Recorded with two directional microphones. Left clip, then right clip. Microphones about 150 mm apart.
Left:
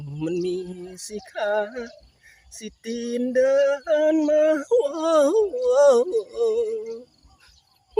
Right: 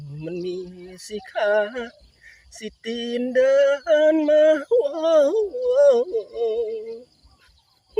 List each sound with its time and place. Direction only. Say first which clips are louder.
0.9 s speech: right 2 dB; 15° left (ahead or behind)
4.7 s speech: right 2 dB; 25° left (ahead or behind)